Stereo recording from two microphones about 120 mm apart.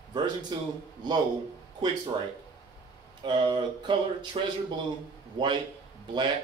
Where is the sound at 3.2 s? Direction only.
40° right (ahead or behind).